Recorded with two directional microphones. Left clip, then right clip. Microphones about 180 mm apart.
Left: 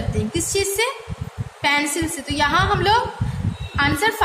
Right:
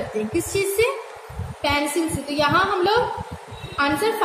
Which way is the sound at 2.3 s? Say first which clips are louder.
Left 1 dB; 60° left (ahead or behind).